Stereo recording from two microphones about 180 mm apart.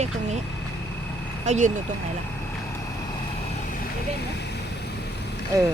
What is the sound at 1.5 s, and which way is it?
Speech, 40° right (ahead or behind).